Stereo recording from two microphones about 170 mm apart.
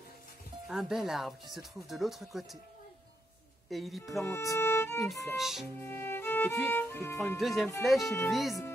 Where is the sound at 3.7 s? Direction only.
Centre (ahead or behind).